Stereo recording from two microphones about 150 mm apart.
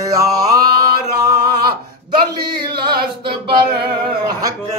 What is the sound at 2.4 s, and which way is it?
Mantra, 30° right (ahead or behind).